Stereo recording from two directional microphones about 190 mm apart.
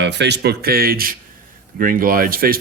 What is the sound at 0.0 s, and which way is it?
A man's voice, 65° right (ahead or behind).